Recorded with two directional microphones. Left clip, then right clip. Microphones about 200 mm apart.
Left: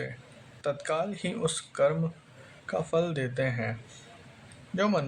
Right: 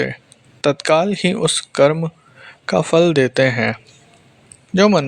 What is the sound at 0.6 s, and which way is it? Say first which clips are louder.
Speech: right 15 dB; 40° right (ahead or behind).